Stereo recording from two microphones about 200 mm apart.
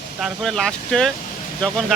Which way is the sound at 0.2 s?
Centre (ahead or behind).